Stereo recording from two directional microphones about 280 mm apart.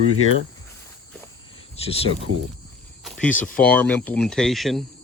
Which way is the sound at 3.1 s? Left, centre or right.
Centre.